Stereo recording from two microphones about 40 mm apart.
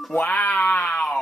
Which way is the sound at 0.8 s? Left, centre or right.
Left.